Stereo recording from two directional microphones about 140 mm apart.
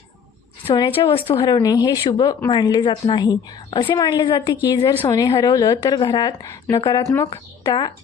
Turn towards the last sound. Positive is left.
turn(degrees=30)  # may be behind; listen again after turning